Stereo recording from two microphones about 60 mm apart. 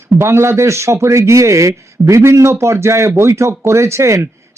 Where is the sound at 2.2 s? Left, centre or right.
Right.